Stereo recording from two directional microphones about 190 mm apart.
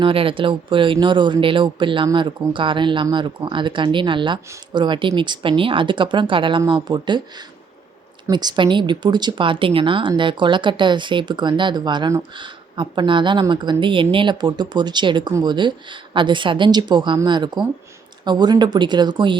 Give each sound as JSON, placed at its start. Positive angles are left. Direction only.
{"t": 0.0, "sound": "speech", "side_deg": -30}